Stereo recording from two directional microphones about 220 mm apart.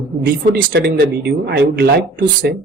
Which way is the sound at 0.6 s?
45° right (ahead or behind).